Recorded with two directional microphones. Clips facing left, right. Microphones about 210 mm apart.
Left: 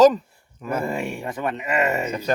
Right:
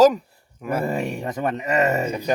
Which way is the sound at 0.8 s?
40° right (ahead or behind).